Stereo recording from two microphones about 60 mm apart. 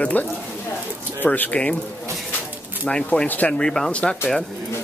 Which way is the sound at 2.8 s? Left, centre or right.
Centre.